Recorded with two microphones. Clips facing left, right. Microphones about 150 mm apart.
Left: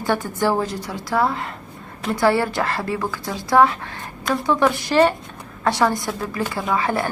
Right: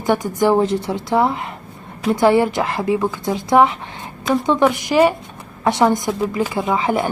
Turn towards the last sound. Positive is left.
turn(degrees=-20)  # may be behind; listen again after turning